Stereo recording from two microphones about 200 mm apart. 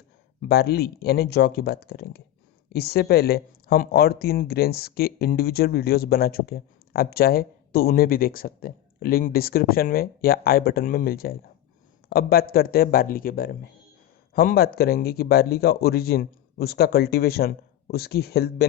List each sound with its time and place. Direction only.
0.4 s speech: 55° left (ahead or behind)